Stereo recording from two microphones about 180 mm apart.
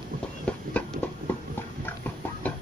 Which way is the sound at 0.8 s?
10° left (ahead or behind).